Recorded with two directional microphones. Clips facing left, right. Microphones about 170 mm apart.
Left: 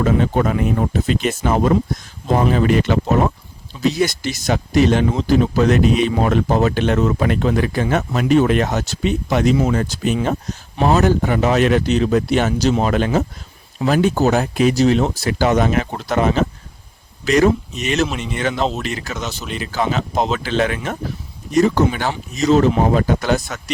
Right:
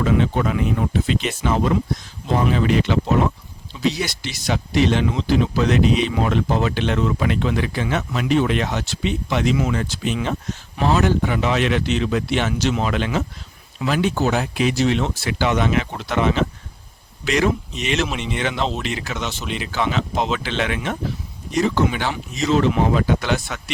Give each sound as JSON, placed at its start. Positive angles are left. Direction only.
{"t": 0.0, "sound": "speech", "side_deg": 45}
{"t": 18.1, "sound": "speech", "side_deg": 0}
{"t": 18.4, "sound": "speech", "side_deg": 40}